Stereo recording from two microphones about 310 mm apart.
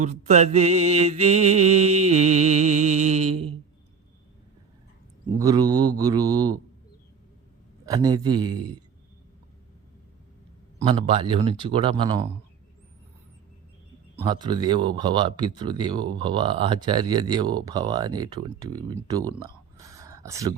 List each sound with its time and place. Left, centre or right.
0.0 s mantra: right
5.4 s speech: centre
7.9 s speech: centre
10.8 s speech: centre
14.2 s speech: centre
19.3 s a sound: centre